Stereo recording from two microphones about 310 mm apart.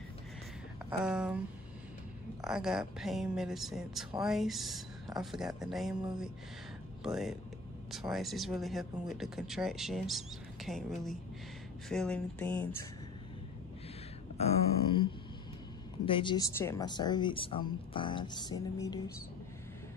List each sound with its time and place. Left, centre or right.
0.8 s speech: centre
2.4 s speech: centre
7.0 s speech: centre
14.4 s speech: centre
16.1 s speech: centre